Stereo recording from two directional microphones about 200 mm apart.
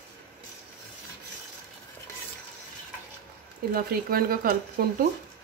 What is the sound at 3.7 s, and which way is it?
Speech, 45° right (ahead or behind).